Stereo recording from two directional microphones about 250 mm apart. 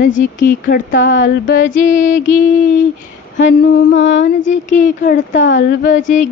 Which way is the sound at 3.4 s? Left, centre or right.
Left.